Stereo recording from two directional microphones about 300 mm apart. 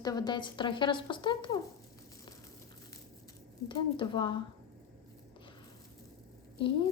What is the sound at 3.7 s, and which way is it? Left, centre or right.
Speech, centre.